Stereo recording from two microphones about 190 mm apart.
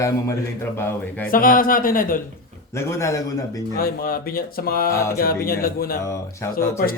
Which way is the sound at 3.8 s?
50° left (ahead or behind).